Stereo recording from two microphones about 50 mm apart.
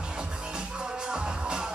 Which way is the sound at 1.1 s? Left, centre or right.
Centre.